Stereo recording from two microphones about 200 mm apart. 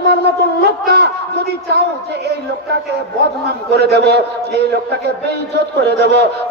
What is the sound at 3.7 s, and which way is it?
Speech, 55° right (ahead or behind).